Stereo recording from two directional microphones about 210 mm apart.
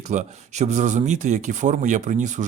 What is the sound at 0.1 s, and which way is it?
Speech, 35° right (ahead or behind).